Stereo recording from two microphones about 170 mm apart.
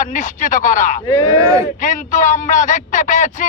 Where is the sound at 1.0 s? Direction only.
25° left (ahead or behind).